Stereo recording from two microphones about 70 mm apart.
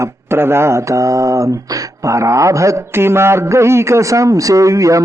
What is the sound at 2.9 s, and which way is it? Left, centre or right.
Speech, right.